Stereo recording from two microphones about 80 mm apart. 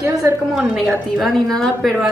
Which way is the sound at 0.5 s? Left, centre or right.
Centre.